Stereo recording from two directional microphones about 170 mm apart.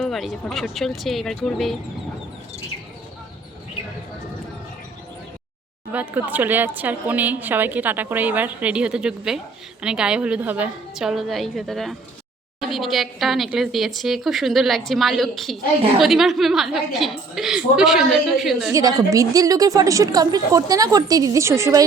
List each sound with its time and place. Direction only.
0.0 s a woman's voice: centre (ahead or behind)
5.9 s a woman's voice: 10° right (ahead or behind)
18.7 s a woman's voice: 20° right (ahead or behind)